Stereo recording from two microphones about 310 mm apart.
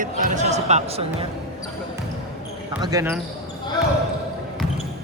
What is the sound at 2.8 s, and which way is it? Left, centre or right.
Speech, centre.